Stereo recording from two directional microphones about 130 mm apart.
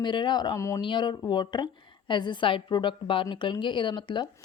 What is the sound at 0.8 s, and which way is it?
A woman's voice, 35° left (ahead or behind).